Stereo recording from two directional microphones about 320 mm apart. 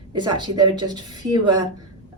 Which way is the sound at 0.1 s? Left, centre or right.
Centre.